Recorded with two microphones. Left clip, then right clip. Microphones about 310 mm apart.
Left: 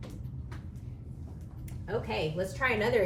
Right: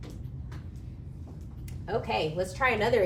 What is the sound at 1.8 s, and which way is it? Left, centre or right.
A woman's voice, centre.